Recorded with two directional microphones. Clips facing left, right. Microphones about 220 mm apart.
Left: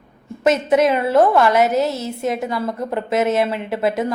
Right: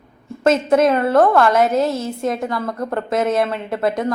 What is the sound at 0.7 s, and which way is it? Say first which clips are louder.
A woman's voice: even; 5° left (ahead or behind).